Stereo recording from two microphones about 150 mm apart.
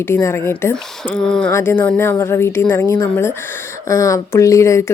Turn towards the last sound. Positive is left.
turn(degrees=20)  # may be behind; listen again after turning